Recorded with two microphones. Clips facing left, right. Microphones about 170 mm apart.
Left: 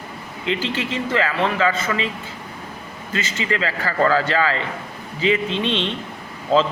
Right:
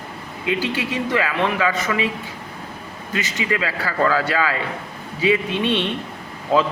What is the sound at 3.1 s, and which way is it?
A man's voice, 15° right (ahead or behind).